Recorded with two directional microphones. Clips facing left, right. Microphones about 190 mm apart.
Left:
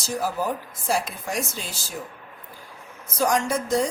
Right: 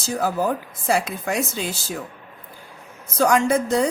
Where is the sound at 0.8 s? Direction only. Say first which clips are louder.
Right 4 dB; 65° right (ahead or behind).